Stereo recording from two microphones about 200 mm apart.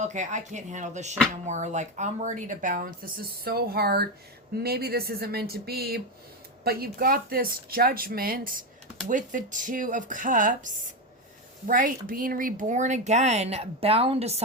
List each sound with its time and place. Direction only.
0.0 s speech: 35° right (ahead or behind)